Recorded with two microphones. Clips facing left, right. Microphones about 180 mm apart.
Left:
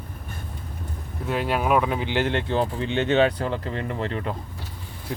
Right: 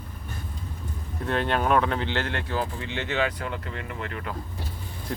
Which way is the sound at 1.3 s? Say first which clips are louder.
Left 1 dB; 5° left (ahead or behind).